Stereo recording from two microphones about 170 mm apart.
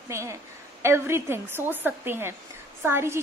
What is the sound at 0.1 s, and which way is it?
A woman's voice, 15° right (ahead or behind).